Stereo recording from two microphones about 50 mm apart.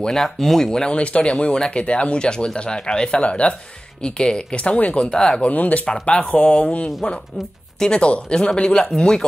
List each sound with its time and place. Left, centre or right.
0.0 s speech: centre; by 5.1 s left
5.1 s speech: centre
5.4 s speech: left; by 9.2 s centre